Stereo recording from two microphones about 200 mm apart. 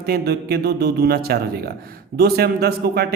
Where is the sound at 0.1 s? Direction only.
55° right (ahead or behind).